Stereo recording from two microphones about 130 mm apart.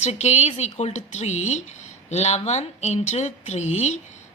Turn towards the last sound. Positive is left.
turn(degrees=60)  # may be behind; listen again after turning